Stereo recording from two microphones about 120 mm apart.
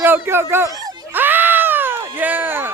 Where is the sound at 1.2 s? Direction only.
15° right (ahead or behind).